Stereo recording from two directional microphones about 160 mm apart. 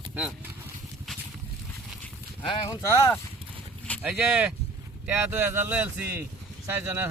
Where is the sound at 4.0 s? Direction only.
5° right (ahead or behind).